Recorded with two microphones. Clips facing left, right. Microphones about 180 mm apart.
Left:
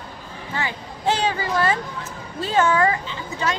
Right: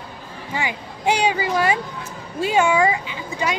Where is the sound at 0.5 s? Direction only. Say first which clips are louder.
Right 2 dB; 15° right (ahead or behind).